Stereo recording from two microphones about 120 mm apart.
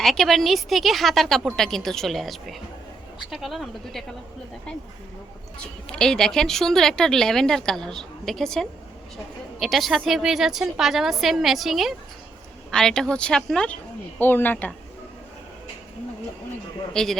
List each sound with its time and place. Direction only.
0.0 s speech: 5° left (ahead or behind)
5.9 s speech: 5° left (ahead or behind)
14.2 s speech: 15° left (ahead or behind)
16.9 s speech: 5° left (ahead or behind)